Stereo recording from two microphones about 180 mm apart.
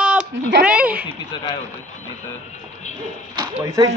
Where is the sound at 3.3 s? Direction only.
20° right (ahead or behind).